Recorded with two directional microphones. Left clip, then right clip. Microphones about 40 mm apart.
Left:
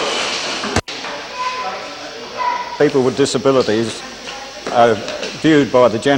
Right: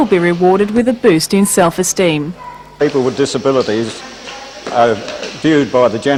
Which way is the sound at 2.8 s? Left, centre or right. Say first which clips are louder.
Right 2 dB; left.